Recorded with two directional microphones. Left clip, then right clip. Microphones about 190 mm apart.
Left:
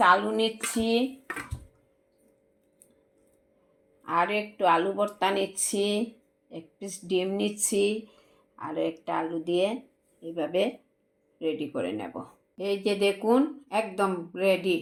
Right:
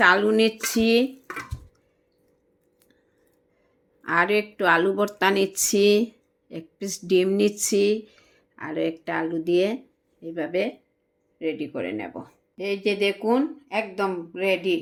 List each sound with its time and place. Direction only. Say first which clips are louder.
0.0 s speech: right 4 dB; 45° right (ahead or behind)
4.0 s speech: right 5 dB; 45° right (ahead or behind)
10.2 s speech: right 1 dB; 25° right (ahead or behind)